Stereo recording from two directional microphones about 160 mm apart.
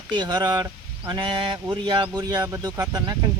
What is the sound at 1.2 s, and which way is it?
Speech, 30° right (ahead or behind).